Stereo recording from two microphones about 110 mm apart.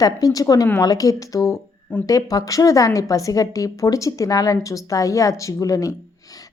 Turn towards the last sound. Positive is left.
turn(degrees=35)  # may be behind; listen again after turning